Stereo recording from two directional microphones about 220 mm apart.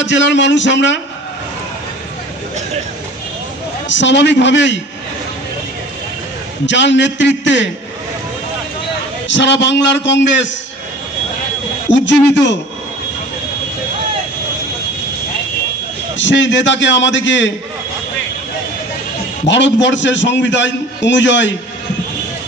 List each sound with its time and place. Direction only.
0.0 s a man's voice: 55° left (ahead or behind)
3.9 s a man's voice: 55° left (ahead or behind)
6.6 s a man's voice: 55° left (ahead or behind)
9.3 s a man's voice: 55° left (ahead or behind)
16.2 s a man's voice: 55° left (ahead or behind)
19.4 s a man's voice: 55° left (ahead or behind)